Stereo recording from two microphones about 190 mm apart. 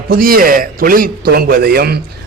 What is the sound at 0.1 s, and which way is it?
A man's voice, 50° right (ahead or behind).